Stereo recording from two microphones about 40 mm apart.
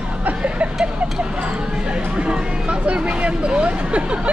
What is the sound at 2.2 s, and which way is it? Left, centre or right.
Speech, right.